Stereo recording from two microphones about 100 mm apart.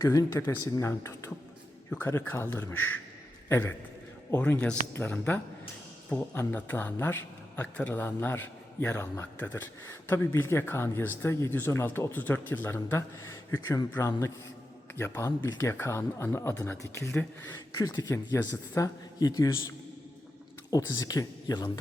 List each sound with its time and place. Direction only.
0.0 s a man's voice: 30° left (ahead or behind)
18.1 s speech: 30° left (ahead or behind)
20.7 s speech: 40° left (ahead or behind)